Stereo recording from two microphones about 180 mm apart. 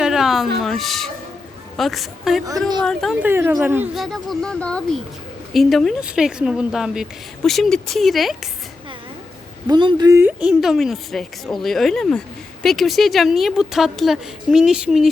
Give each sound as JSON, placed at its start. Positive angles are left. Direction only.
{"t": 0.0, "sound": "a sound", "side_deg": 0}
{"t": 1.7, "sound": "speech", "side_deg": 0}
{"t": 3.2, "sound": "speech", "side_deg": -15}
{"t": 4.0, "sound": "speech", "side_deg": 0}
{"t": 9.6, "sound": "speech", "side_deg": -25}